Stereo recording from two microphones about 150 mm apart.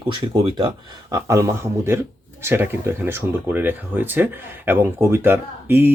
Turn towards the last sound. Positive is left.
turn(degrees=-15)  # may be behind; listen again after turning